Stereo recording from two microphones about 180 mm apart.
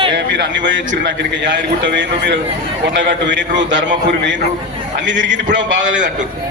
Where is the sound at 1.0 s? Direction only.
80° right.